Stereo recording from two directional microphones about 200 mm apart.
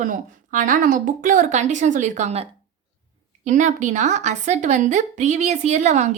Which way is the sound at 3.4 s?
40° right (ahead or behind).